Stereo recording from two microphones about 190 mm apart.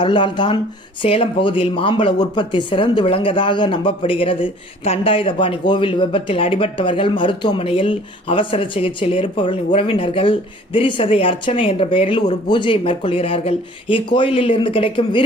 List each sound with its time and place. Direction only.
0.0 s speech: 25° left (ahead or behind)